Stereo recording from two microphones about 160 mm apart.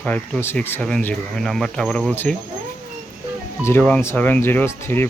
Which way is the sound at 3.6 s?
10° left (ahead or behind).